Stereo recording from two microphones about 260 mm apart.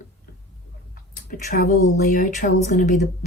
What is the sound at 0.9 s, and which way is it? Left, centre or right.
Speech, left.